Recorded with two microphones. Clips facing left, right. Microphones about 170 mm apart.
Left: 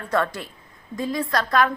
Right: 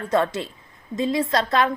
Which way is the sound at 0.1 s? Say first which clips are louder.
Right 2 dB; 20° right (ahead or behind).